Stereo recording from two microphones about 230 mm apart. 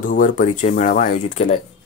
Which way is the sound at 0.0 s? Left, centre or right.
Left.